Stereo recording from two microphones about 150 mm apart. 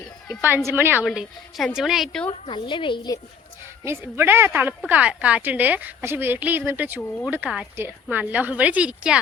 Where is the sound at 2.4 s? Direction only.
30° left (ahead or behind).